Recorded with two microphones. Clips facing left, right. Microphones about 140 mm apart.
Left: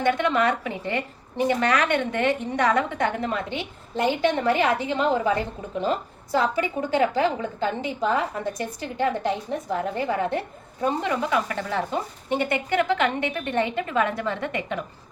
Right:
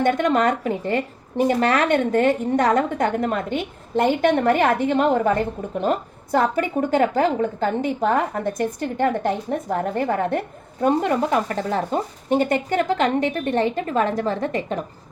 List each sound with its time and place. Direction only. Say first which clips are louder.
0.0 s speech: right 3 dB; 45° right (ahead or behind)